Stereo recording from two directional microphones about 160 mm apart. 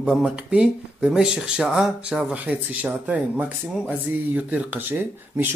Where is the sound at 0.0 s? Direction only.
5° right (ahead or behind).